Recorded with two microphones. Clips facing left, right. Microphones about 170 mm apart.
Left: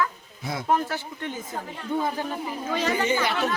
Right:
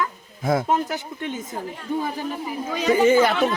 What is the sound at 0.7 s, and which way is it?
Speech, 20° right (ahead or behind).